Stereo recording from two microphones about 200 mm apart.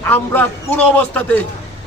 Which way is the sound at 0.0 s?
10° left (ahead or behind).